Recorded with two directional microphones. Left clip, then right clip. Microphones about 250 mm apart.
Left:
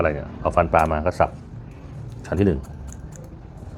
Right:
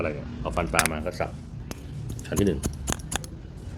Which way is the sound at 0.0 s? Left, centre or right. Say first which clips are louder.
Left 8 dB; left.